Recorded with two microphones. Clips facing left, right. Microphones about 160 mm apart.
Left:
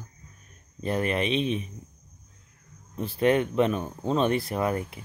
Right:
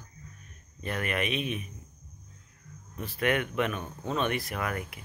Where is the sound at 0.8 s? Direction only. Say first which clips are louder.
Left 5 dB; 30° left (ahead or behind).